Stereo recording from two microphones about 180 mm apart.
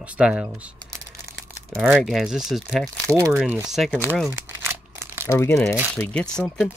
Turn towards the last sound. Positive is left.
turn(degrees=5)  # may be behind; listen again after turning